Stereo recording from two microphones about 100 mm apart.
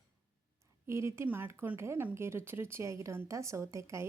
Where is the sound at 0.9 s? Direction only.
25° right (ahead or behind).